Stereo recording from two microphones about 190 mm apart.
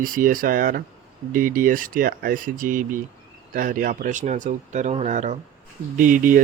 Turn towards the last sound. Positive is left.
turn(degrees=-45)  # may be behind; listen again after turning